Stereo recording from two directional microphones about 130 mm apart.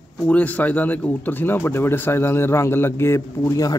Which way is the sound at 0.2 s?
10° left (ahead or behind).